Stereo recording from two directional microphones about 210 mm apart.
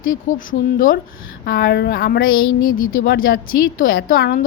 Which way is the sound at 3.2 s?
45° left (ahead or behind).